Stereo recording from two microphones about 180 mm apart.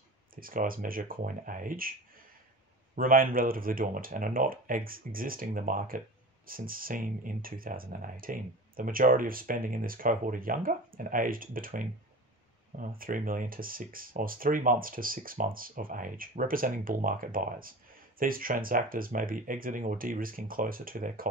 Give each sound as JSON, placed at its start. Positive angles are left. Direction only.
{"t": 0.4, "sound": "speech", "side_deg": -50}
{"t": 3.0, "sound": "speech", "side_deg": -50}